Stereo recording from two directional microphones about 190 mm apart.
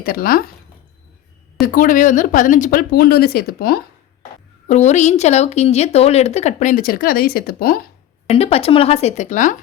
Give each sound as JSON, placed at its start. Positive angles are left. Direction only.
{"t": 0.0, "sound": "speech", "side_deg": 50}
{"t": 1.6, "sound": "speech", "side_deg": 45}
{"t": 4.7, "sound": "speech", "side_deg": 35}
{"t": 8.3, "sound": "speech", "side_deg": 30}